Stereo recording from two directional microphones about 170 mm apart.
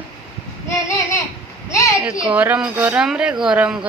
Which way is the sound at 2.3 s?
10° right (ahead or behind).